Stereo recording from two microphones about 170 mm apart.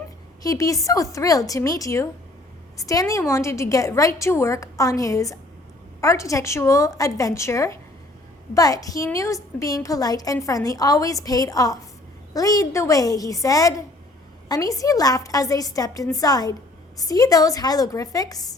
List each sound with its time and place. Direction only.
0.4 s a woman's voice: 20° left (ahead or behind)